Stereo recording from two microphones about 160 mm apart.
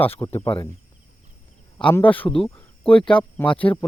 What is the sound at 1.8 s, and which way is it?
Speech, 10° left (ahead or behind).